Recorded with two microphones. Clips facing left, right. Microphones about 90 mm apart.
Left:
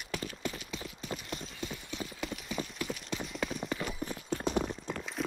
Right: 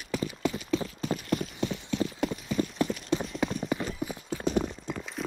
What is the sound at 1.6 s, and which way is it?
Clip-clop, 75° right (ahead or behind).